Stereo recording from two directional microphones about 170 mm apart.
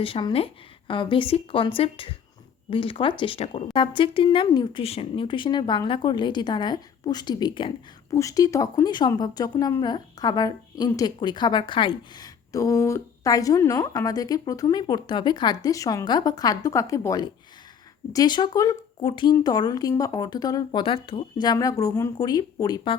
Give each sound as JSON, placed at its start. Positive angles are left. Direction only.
{"t": 0.0, "sound": "a woman's voice", "side_deg": 30}